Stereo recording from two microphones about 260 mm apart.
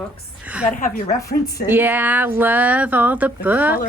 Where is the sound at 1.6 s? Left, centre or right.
Centre.